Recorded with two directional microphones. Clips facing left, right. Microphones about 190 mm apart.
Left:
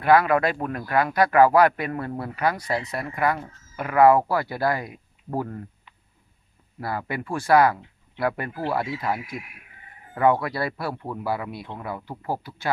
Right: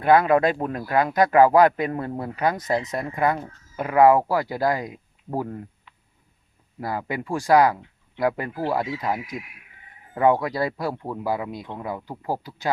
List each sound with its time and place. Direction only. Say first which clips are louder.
0.0 s speech: right 1 dB; 20° right (ahead or behind)
6.7 s speech: right 1 dB; 15° right (ahead or behind)